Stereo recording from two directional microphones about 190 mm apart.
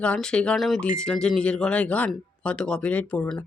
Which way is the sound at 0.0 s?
5° left (ahead or behind).